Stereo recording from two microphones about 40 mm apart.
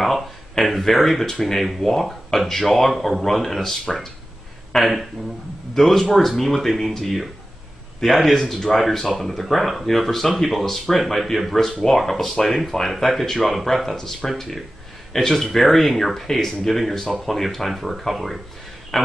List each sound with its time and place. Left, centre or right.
0.0 s speech: centre
8.5 s speech: centre
8.9 s a man's voice: centre